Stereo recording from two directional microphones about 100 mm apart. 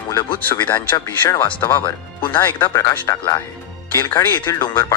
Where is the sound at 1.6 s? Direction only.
30° left (ahead or behind).